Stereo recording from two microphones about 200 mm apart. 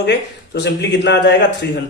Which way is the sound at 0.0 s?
60° left (ahead or behind).